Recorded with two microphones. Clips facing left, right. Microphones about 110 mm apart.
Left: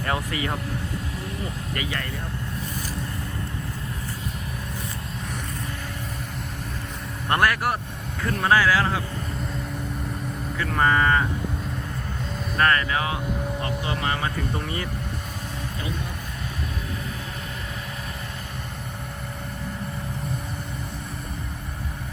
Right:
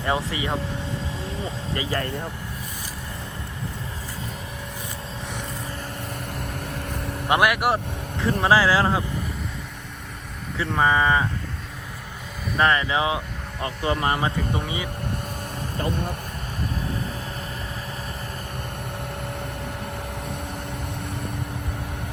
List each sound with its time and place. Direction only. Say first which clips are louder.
0.0 s speech: right 2 dB; 25° right (ahead or behind)
1.7 s speech: right 5 dB; 30° right (ahead or behind)
7.3 s speech: right 2 dB; 10° right (ahead or behind)
8.2 s speech: right 2 dB; 20° right (ahead or behind)
10.6 s speech: right 1 dB; 15° right (ahead or behind)
12.6 s speech: right 2 dB; 20° right (ahead or behind)
13.8 s speech: right 7 dB; 35° right (ahead or behind)
14.5 s speech: right 1 dB; 5° right (ahead or behind)